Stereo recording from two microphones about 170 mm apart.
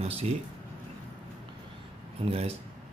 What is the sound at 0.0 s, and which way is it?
Speech, 35° right (ahead or behind).